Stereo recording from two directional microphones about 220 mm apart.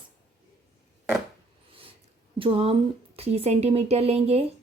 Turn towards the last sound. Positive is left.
turn(degrees=-30)  # may be behind; listen again after turning